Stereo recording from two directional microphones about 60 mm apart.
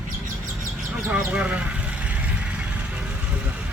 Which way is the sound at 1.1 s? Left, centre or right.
Right.